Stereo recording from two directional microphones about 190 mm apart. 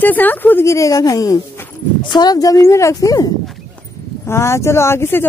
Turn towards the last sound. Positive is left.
turn(degrees=10)  # may be behind; listen again after turning